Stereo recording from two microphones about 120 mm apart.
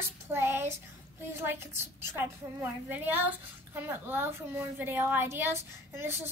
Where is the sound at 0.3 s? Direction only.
20° right (ahead or behind).